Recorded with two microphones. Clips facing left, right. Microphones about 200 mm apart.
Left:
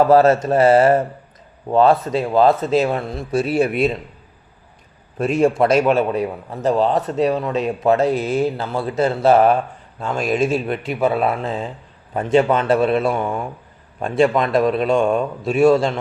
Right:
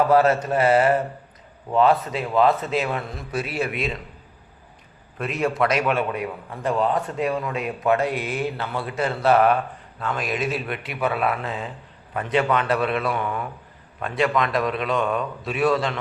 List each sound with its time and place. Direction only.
0.1 s a man's voice: 30° left (ahead or behind)
5.3 s speech: 30° left (ahead or behind)